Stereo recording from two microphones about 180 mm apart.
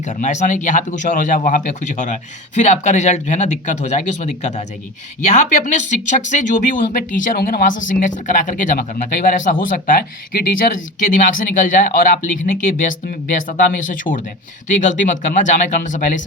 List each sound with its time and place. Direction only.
0.0 s speech: 40° left (ahead or behind)